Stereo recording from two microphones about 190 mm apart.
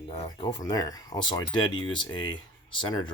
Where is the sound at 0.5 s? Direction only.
20° left (ahead or behind).